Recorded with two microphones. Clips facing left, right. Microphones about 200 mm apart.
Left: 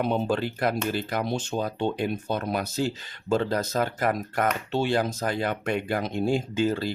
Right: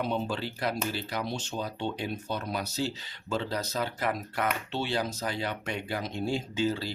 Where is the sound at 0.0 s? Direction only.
55° left (ahead or behind).